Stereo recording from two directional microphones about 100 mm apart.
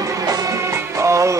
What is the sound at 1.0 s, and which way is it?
Music, 30° right (ahead or behind).